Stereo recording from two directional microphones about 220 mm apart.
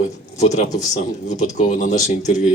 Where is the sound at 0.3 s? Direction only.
30° left (ahead or behind).